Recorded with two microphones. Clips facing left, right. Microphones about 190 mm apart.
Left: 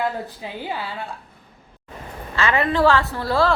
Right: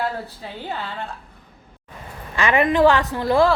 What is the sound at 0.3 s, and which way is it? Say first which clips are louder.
Speech: left 1 dB; 10° left (ahead or behind).